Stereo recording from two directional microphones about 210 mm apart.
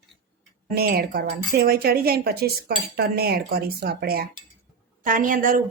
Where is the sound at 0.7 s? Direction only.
45° right (ahead or behind).